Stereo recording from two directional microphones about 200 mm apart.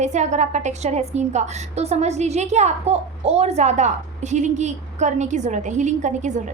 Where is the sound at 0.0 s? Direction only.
35° right (ahead or behind).